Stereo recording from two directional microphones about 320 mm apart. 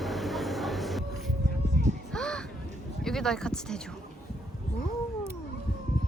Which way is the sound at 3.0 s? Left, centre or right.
Centre.